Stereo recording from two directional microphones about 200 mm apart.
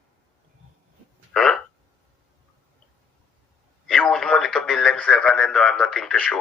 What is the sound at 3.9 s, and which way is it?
Speech, 5° left (ahead or behind).